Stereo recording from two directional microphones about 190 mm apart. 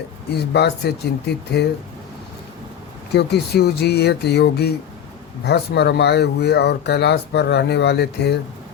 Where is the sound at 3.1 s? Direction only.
60° left (ahead or behind).